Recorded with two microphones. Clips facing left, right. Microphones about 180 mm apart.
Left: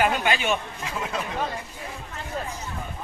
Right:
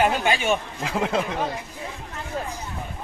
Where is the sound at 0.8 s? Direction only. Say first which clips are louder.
Right 6 dB; 80° right.